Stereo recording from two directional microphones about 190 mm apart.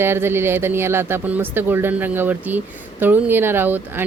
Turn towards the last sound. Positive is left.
turn(degrees=-10)  # may be behind; listen again after turning